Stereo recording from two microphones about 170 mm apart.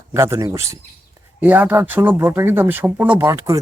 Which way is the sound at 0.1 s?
15° right (ahead or behind).